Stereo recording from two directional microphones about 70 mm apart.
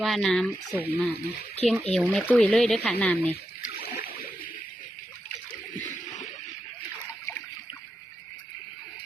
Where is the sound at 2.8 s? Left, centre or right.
Left.